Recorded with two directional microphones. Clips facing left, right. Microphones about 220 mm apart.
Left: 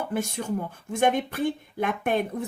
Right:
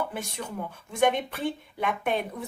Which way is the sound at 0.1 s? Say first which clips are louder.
Left 7 dB; 45° left (ahead or behind).